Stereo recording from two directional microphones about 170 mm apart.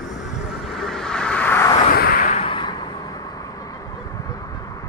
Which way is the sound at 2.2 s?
35° left (ahead or behind).